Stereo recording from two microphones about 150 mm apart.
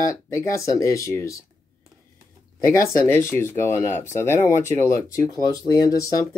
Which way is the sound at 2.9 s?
15° left (ahead or behind).